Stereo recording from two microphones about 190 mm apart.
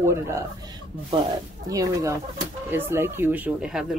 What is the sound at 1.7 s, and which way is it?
Speech, 20° right (ahead or behind).